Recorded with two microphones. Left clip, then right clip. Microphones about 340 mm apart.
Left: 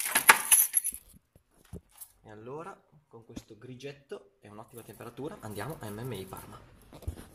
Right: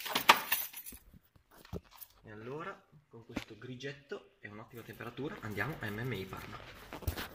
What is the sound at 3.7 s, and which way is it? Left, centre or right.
Speech, centre.